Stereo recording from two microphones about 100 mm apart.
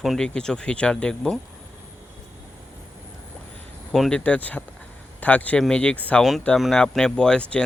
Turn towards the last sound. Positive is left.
turn(degrees=10)  # may be behind; listen again after turning